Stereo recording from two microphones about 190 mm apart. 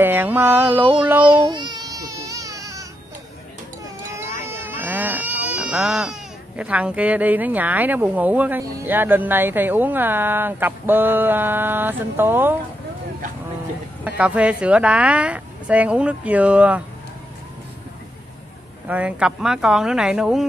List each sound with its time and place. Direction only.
0.0 s speech: 10° right (ahead or behind)
1.3 s baby cry: 25° right (ahead or behind)
4.1 s speech: 15° right (ahead or behind)
14.0 s speech: 5° right (ahead or behind)
18.9 s speech: 5° right (ahead or behind)